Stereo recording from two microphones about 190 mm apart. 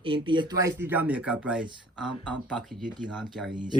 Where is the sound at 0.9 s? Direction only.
10° right (ahead or behind).